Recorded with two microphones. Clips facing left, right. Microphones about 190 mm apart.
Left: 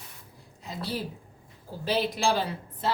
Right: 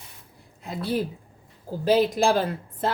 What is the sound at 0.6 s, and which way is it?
A woman's voice, 55° right (ahead or behind).